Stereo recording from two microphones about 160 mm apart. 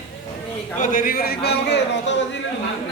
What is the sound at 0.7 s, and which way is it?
A man's voice, 60° left (ahead or behind).